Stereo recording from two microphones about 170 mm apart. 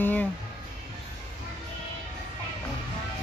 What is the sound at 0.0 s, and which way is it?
Music, 10° left (ahead or behind).